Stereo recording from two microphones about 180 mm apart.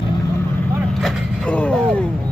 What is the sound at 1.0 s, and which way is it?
Speech, 5° left (ahead or behind).